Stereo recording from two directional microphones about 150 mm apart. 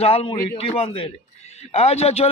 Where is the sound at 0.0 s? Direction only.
40° left (ahead or behind).